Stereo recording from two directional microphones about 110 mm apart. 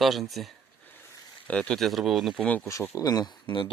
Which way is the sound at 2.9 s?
35° left (ahead or behind).